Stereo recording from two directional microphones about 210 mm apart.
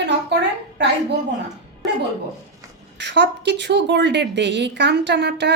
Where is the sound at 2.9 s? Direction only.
55° right (ahead or behind).